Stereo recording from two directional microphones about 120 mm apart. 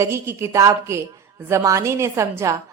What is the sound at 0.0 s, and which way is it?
A woman's voice, 20° right (ahead or behind).